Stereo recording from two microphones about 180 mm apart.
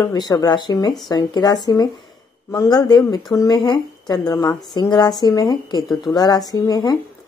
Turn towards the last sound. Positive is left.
turn(degrees=20)  # may be behind; listen again after turning